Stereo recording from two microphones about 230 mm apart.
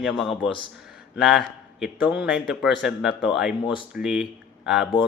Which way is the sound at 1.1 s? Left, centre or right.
Centre.